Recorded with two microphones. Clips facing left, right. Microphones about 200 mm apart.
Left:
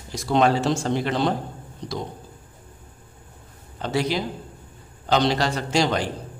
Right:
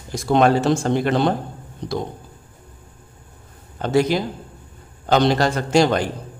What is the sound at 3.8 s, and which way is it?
Speech, 50° right (ahead or behind).